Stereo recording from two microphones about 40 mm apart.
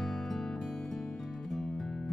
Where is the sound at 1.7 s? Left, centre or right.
Centre.